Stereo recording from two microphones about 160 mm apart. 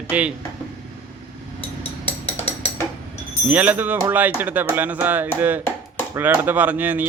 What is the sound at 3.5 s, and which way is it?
Speech, 10° right (ahead or behind).